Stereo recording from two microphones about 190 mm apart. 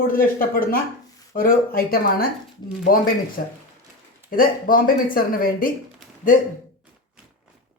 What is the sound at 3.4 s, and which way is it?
Speech, 55° left (ahead or behind).